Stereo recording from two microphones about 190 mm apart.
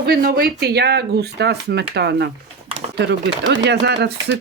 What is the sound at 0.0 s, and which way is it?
Speech, 55° right (ahead or behind).